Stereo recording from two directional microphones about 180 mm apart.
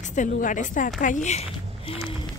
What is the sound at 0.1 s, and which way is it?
A woman's voice, 45° left (ahead or behind).